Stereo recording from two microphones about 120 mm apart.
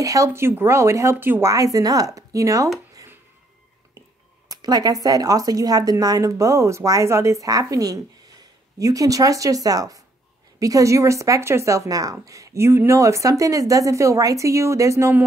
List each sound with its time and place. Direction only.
0.0 s a woman's voice: 25° right (ahead or behind)
4.5 s a woman's voice: 35° right (ahead or behind)